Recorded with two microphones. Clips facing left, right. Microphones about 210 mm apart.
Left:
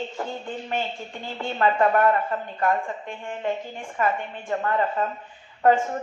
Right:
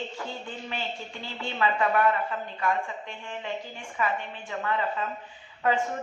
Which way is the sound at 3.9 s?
45° left (ahead or behind).